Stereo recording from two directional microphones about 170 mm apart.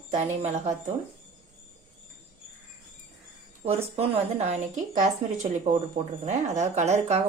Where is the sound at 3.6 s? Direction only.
35° right (ahead or behind).